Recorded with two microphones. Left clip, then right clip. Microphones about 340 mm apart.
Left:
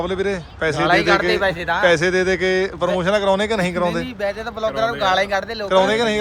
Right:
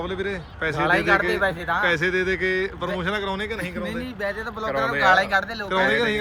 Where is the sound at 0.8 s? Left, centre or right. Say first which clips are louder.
Left 3 dB; left.